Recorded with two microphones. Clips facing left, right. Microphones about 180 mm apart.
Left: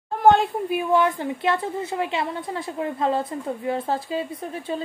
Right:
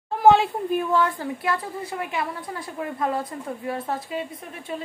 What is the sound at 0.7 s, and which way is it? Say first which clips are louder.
A woman's voice: left 3 dB; 15° left (ahead or behind).